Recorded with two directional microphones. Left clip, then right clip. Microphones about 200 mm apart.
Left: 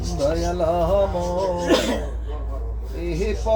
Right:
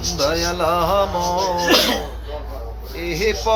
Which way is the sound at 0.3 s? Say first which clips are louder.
Right 1 dB; 10° left (ahead or behind).